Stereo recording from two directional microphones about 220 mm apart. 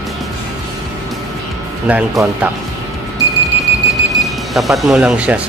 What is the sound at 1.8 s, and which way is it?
Speech, 5° right (ahead or behind).